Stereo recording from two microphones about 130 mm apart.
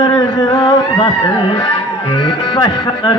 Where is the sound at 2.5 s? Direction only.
35° left (ahead or behind).